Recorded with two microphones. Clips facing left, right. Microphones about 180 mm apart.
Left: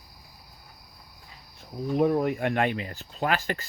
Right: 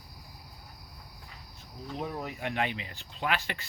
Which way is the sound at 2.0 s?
55° left (ahead or behind).